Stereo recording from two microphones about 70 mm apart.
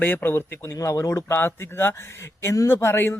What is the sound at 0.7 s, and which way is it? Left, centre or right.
Speech, left.